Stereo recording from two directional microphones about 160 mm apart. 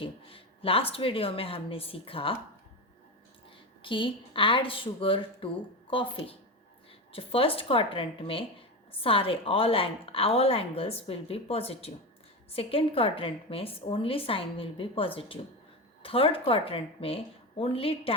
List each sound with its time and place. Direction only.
0.0 s speech: 35° left (ahead or behind)
3.8 s speech: 30° left (ahead or behind)